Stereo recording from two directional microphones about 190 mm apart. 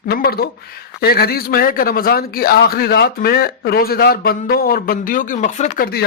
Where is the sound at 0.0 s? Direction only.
50° left (ahead or behind).